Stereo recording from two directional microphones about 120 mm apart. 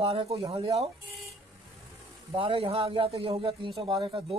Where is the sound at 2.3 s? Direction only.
50° right (ahead or behind).